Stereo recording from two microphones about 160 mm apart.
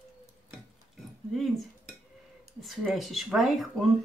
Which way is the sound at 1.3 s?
Centre (ahead or behind).